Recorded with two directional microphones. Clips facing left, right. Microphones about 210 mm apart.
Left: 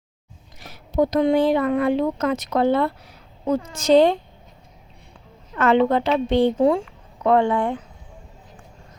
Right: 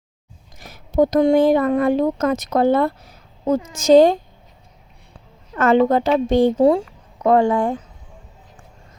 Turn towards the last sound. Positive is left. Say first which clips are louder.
# right 3 dB
turn(degrees=-40)  # may be behind; listen again after turning